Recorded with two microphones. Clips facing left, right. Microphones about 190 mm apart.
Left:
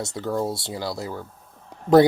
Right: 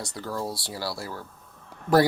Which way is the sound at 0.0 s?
25° left (ahead or behind).